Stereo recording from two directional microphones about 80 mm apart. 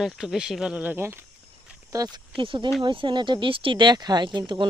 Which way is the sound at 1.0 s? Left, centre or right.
Right.